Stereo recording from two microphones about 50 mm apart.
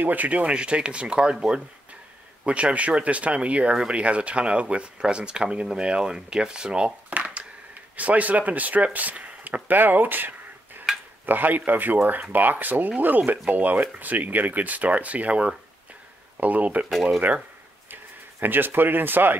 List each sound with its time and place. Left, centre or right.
0.0 s speech: right
7.9 s speech: right
17.9 s speech: right